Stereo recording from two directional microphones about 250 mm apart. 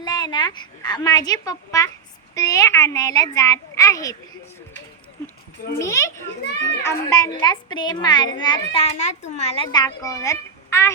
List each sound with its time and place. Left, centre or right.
0.0 s a child's voice: centre
5.8 s a child's voice: centre